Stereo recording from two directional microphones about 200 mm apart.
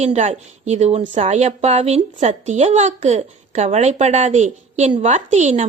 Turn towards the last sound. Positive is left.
turn(degrees=-35)  # may be behind; listen again after turning